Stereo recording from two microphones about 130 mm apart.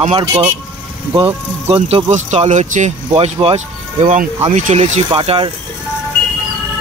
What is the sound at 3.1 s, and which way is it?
Speech, 50° right (ahead or behind).